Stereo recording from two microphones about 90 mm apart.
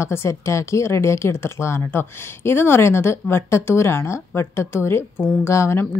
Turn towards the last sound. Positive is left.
turn(degrees=30)  # may be behind; listen again after turning